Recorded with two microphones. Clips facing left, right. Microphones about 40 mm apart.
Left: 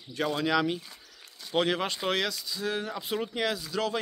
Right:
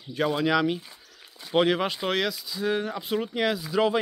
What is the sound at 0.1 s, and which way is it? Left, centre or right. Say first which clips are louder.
Speech: right 3 dB; centre.